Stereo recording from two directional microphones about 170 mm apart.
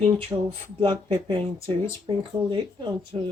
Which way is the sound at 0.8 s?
30° right (ahead or behind).